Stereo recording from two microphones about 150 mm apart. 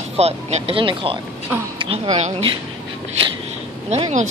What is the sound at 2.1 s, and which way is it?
Speech, 50° right (ahead or behind).